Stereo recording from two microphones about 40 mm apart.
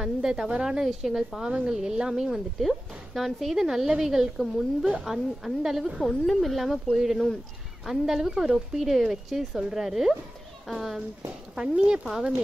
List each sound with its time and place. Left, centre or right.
0.0 s a woman's voice: centre
1.5 s speech: right
3.2 s a woman's voice: centre
5.9 s speech: centre
6.9 s a woman's voice: centre
11.5 s speech: right
12.1 s a woman's voice: centre